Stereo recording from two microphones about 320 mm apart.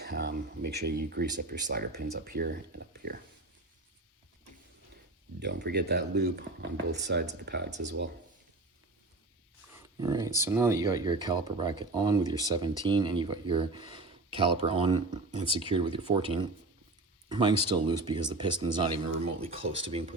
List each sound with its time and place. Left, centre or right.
0.0 s speech: right
5.4 s speech: right
10.0 s speech: centre